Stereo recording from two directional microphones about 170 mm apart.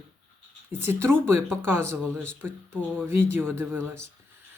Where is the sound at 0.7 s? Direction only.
15° right (ahead or behind).